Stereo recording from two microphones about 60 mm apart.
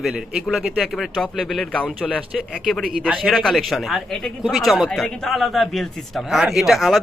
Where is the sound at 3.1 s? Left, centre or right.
Centre.